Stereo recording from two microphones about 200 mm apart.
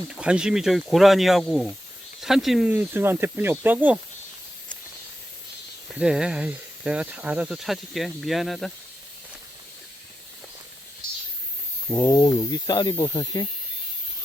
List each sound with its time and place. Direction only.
0.1 s speech: 5° right (ahead or behind)
5.9 s speech: 5° right (ahead or behind)
11.9 s speech: 15° left (ahead or behind)